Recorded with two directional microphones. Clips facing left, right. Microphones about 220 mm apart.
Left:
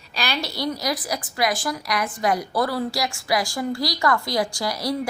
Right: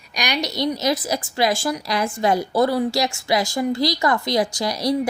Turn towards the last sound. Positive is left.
turn(degrees=-20)  # may be behind; listen again after turning